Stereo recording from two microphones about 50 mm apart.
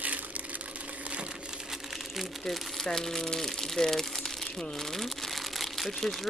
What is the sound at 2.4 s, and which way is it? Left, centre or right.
Speech, centre.